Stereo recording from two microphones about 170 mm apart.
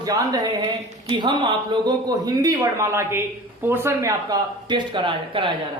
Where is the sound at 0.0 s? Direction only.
20° right (ahead or behind).